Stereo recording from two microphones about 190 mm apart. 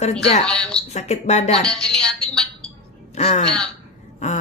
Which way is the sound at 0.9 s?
35° left (ahead or behind).